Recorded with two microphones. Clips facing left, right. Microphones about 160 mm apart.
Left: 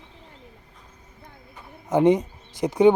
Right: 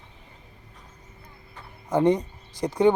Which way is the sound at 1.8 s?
20° left (ahead or behind).